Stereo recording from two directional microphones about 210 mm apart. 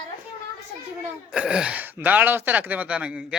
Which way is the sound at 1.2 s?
5° right (ahead or behind).